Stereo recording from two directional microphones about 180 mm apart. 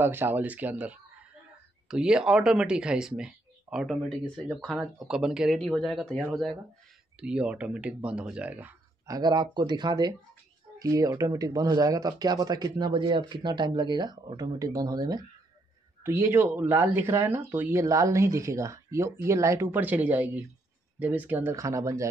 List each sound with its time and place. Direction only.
0.0 s speech: 10° right (ahead or behind)